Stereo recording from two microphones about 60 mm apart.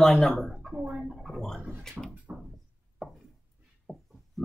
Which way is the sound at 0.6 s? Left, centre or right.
Centre.